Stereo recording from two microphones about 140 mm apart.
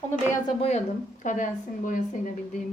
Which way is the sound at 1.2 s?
70° left (ahead or behind).